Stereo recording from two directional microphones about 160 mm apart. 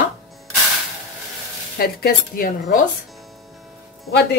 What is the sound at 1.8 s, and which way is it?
A woman's voice, 65° left (ahead or behind).